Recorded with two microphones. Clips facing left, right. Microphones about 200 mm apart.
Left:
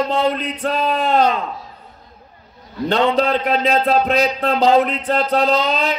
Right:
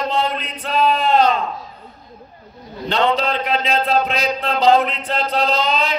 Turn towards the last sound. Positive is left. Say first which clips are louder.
# left 2 dB
turn(degrees=45)  # may be behind; listen again after turning